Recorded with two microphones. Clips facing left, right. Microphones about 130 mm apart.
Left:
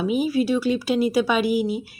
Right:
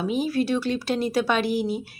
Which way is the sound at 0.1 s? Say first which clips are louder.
Left 2 dB; 5° left (ahead or behind).